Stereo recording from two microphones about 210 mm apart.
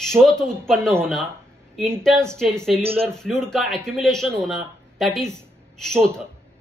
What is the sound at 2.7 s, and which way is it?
Speech, 30° right (ahead or behind).